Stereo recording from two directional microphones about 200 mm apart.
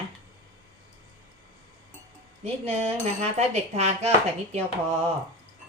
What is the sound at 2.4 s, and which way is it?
Speech, 30° right (ahead or behind).